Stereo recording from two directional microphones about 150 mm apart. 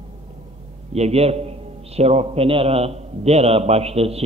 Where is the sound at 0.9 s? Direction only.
45° right (ahead or behind).